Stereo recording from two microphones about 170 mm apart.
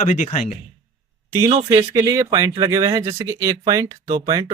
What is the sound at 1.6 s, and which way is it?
Speech, 20° right (ahead or behind).